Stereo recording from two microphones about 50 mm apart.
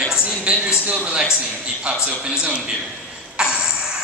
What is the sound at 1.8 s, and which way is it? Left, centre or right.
Speech, right.